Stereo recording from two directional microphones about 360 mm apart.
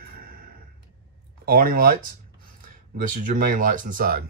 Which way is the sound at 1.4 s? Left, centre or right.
Right.